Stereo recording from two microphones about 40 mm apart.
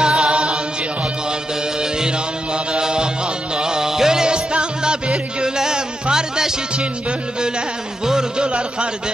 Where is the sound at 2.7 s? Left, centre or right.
Right.